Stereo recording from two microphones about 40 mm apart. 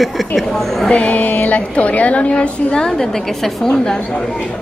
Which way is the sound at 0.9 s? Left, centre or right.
Left.